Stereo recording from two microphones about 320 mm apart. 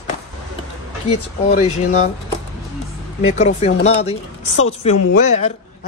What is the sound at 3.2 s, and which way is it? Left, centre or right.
A man's voice, centre.